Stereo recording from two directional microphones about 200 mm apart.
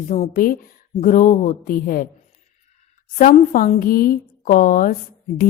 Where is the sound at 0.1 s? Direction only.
40° left (ahead or behind).